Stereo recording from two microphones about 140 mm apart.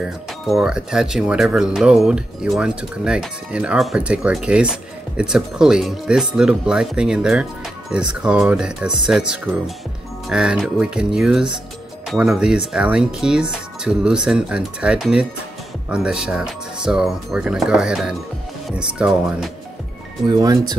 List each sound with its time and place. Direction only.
0.0 s speech: 5° right (ahead or behind)
20.2 s speech: 30° right (ahead or behind)